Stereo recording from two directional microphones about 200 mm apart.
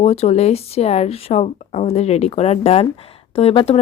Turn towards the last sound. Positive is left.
turn(degrees=30)  # may be behind; listen again after turning